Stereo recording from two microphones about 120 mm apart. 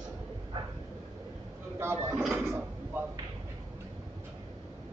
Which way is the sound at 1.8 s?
20° right (ahead or behind).